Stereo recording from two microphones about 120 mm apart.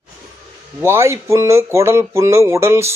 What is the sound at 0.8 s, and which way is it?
Speech, 20° right (ahead or behind).